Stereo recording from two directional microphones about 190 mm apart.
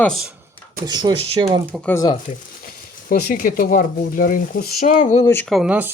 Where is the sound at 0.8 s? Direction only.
20° right (ahead or behind).